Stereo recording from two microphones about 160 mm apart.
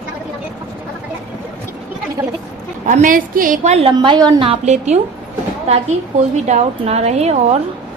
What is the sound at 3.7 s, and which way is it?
Speech, 35° right (ahead or behind).